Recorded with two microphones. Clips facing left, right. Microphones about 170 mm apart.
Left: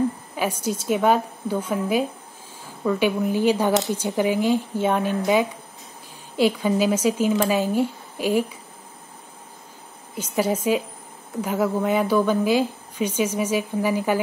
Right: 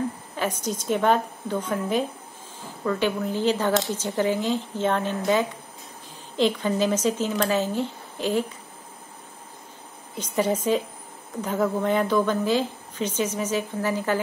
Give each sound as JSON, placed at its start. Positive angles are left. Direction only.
{"t": 0.4, "sound": "a woman's voice", "side_deg": 10}
{"t": 10.1, "sound": "a woman's voice", "side_deg": 10}